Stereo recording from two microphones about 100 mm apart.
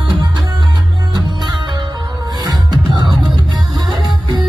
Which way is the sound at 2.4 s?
40° right (ahead or behind).